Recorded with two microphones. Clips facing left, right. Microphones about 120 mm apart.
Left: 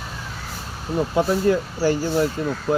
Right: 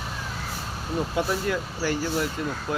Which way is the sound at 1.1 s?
30° left (ahead or behind).